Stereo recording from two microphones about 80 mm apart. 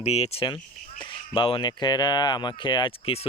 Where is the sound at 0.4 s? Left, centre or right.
Left.